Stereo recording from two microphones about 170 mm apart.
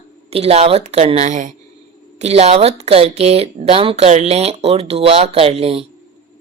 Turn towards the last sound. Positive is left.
turn(degrees=-35)  # may be behind; listen again after turning